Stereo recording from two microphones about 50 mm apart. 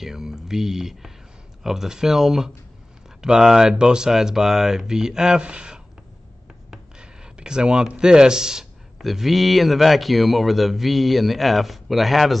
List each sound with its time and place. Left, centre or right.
0.0 s speech: centre
6.7 s a sound: centre
8.9 s a man's voice: centre